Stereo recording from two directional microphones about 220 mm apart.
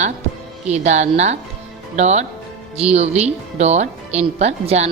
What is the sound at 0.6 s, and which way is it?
A woman's voice, 30° right (ahead or behind).